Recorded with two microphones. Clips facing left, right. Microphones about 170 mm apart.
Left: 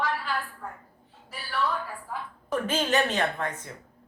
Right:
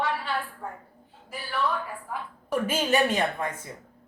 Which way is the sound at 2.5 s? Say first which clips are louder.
Right 1 dB; 10° right (ahead or behind).